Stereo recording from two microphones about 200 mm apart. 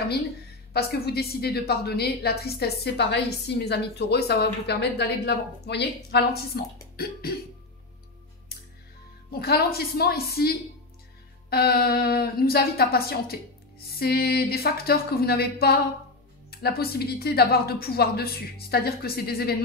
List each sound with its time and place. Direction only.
0.7 s a woman's voice: 50° left (ahead or behind)
9.3 s a woman's voice: 50° left (ahead or behind)
11.5 s a woman's voice: 50° left (ahead or behind)